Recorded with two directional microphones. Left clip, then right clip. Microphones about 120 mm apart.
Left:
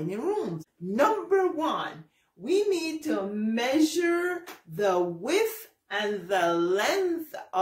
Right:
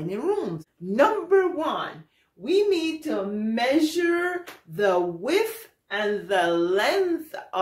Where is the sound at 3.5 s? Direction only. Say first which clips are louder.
Right 3 dB; 40° right (ahead or behind).